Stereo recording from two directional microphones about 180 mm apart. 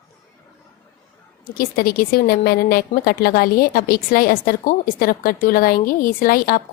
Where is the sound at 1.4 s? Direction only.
55° left (ahead or behind).